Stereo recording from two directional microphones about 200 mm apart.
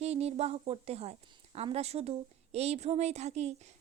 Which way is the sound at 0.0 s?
30° right (ahead or behind).